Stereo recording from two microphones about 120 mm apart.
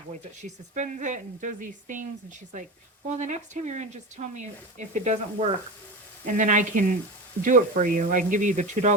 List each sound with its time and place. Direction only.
0.4 s speech: 80° right
3.2 s speech: 80° right
4.9 s speech: 75° right (ahead or behind)
6.2 s speech: 90° right